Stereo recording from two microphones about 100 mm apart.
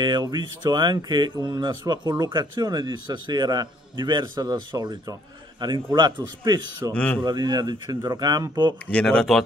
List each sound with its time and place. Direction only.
0.0 s speech: 50° right (ahead or behind)
6.9 s speech: 10° left (ahead or behind)
7.2 s speech: 45° right (ahead or behind)
8.8 s speech: 10° left (ahead or behind)